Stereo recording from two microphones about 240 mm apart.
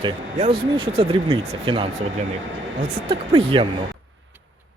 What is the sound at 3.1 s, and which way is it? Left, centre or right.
Speech, right.